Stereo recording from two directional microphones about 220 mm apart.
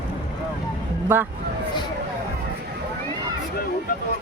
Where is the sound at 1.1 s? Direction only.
10° right (ahead or behind).